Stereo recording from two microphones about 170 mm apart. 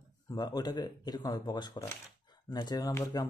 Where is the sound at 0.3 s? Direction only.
25° left (ahead or behind).